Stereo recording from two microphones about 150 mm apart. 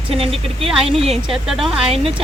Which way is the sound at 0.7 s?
Centre (ahead or behind).